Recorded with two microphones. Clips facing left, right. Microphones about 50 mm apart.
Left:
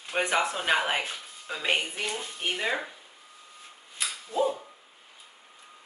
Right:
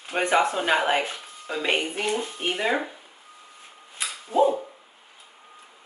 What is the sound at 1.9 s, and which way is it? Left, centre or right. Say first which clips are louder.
Speech: right 6 dB; right.